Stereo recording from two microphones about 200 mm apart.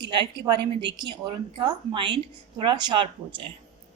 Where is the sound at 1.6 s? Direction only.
25° right (ahead or behind).